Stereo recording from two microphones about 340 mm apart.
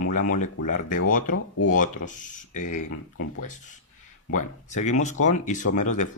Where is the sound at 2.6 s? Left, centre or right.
Left.